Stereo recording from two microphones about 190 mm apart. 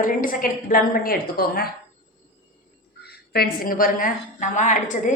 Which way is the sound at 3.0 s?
55° left (ahead or behind).